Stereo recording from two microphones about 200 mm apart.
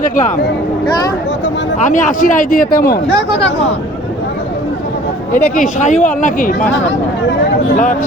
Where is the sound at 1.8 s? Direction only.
40° left (ahead or behind).